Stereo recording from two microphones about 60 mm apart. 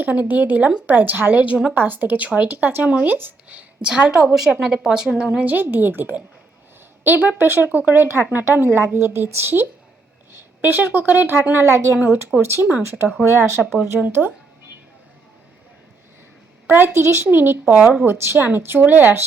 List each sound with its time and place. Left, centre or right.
0.0 s a woman's voice: right
1.7 s a woman's voice: right
3.2 s speech: right
3.6 s a woman's voice: centre
5.4 s a woman's voice: right
11.9 s a woman's voice: right
12.4 s speech: right
13.1 s speech: centre
14.1 s a woman's voice: right
16.6 s a woman's voice: right